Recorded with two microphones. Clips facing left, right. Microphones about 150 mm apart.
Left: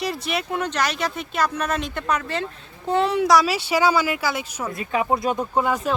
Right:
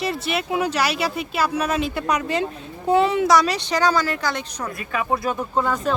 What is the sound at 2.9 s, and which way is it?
Speech, centre (ahead or behind).